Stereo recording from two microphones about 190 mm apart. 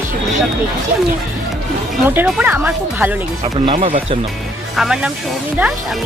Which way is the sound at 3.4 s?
30° right (ahead or behind).